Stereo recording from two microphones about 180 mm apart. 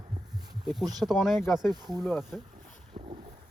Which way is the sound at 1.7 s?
20° right (ahead or behind).